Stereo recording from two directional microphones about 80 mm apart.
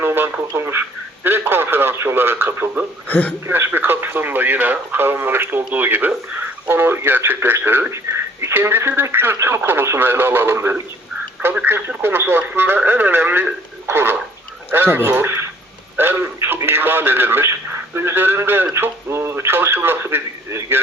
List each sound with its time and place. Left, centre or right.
0.0 s radio: right
0.5 s speech: right
3.1 s a man's voice: centre
3.4 s speech: right